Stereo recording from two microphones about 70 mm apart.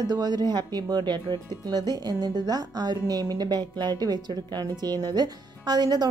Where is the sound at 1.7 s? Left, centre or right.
Right.